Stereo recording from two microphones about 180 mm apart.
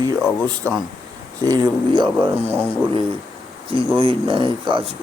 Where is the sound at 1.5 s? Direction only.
25° right (ahead or behind).